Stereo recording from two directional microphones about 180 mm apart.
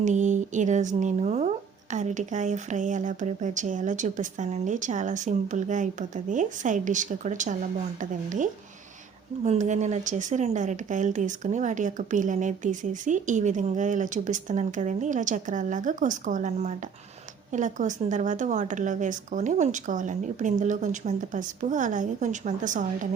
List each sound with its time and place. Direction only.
0.0 s speech: 40° right (ahead or behind)